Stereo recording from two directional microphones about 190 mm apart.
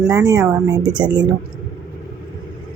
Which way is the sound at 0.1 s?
20° right (ahead or behind).